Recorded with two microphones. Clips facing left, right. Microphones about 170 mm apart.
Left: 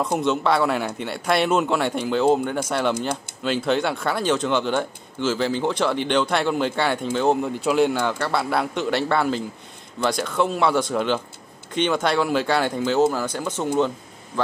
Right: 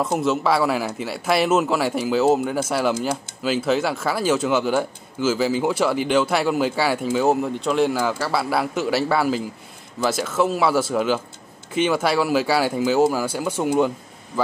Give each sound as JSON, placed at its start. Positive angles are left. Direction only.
{"t": 0.0, "sound": "a man's voice", "side_deg": -5}